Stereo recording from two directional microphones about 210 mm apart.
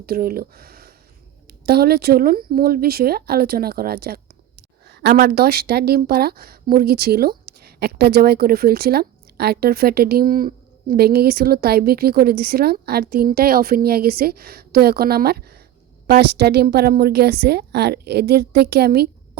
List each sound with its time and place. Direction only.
0.0 s speech: 45° right (ahead or behind)